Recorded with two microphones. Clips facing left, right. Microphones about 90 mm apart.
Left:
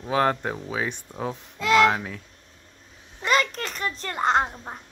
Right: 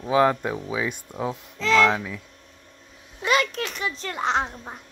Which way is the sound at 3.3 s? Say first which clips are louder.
Even; 40° left (ahead or behind).